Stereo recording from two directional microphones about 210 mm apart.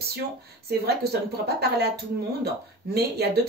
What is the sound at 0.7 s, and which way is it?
Speech, 50° right (ahead or behind).